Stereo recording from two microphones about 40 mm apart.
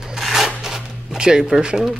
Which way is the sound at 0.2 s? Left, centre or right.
Centre.